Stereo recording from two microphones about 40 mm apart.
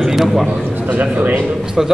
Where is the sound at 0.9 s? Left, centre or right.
Right.